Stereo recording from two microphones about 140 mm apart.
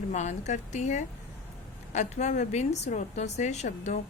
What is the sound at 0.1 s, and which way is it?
A woman's voice, 55° left (ahead or behind).